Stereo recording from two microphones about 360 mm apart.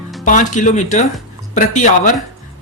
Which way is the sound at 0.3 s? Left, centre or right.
Left.